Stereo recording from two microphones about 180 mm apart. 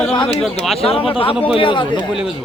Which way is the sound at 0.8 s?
30° left (ahead or behind).